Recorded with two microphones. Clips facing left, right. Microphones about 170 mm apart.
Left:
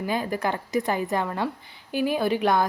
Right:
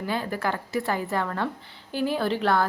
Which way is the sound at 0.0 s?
15° left (ahead or behind).